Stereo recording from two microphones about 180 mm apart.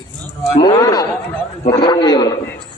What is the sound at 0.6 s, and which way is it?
A man's voice, 20° left (ahead or behind).